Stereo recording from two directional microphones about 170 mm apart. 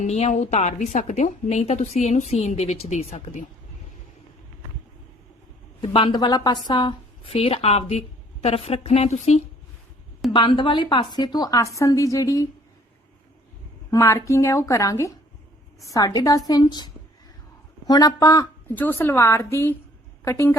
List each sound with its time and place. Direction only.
0.0 s a woman's voice: 40° left (ahead or behind)
5.8 s a woman's voice: 30° left (ahead or behind)
10.3 s a woman's voice: 30° left (ahead or behind)
13.9 s a woman's voice: 15° left (ahead or behind)